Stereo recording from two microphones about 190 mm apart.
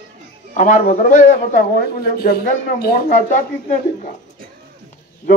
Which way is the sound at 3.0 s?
40° left (ahead or behind).